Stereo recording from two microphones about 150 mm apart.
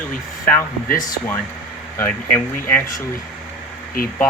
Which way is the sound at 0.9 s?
25° left (ahead or behind).